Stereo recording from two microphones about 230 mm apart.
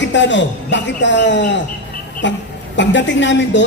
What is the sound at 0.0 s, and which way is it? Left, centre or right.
A man's voice, left.